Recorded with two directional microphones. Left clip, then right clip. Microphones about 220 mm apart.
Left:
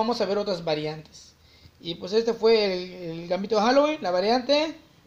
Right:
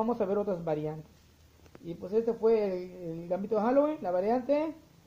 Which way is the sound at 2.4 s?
10° left (ahead or behind).